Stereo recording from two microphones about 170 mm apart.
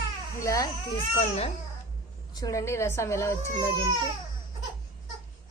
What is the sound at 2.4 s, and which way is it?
A woman's voice, 20° left (ahead or behind).